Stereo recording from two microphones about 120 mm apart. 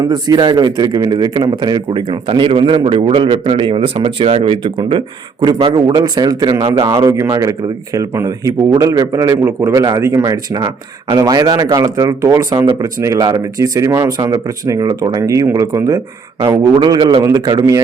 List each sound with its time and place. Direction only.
0.0 s a man's voice: 35° right (ahead or behind)